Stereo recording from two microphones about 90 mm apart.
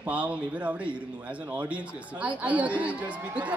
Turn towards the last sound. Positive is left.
turn(degrees=-15)  # may be behind; listen again after turning